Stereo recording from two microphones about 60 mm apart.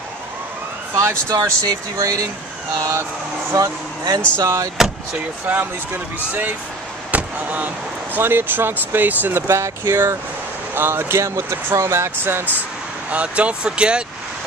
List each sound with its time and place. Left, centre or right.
1.3 s speech: right
5.5 s speech: right
7.1 s slam: right
8.2 s speech: right
13.1 s speech: right